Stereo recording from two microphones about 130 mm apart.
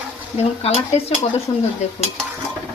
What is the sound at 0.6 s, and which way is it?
Speech, 50° left (ahead or behind).